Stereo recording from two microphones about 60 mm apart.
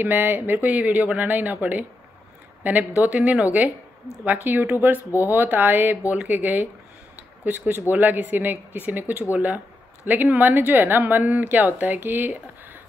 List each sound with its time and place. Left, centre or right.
0.0 s speech: right
4.5 s speech: right
7.2 s a sound: right
7.9 s speech: right